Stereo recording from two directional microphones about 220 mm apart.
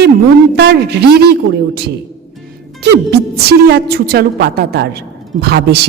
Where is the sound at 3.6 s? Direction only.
45° right (ahead or behind).